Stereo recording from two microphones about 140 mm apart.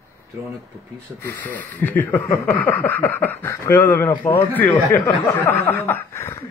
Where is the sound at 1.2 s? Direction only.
10° left (ahead or behind).